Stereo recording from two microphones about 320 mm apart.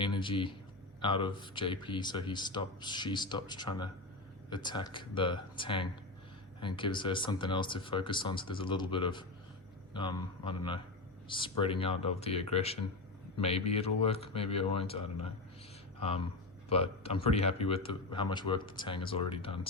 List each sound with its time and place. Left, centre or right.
0.0 s a sound: centre
1.0 s a man's voice: centre
16.0 s a man's voice: centre